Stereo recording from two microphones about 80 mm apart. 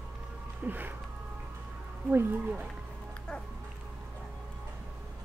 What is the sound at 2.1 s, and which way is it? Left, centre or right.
Speech, right.